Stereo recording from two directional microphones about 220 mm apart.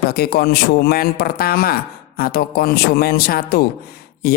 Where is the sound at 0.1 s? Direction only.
45° left (ahead or behind).